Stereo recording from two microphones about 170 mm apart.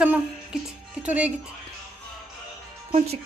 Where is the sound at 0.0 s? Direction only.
10° right (ahead or behind).